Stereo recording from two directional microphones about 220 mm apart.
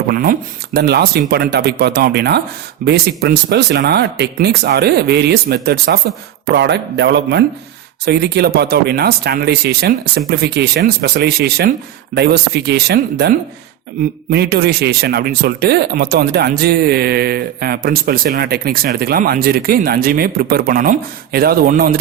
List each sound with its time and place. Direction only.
0.1 s speech: 45° right (ahead or behind)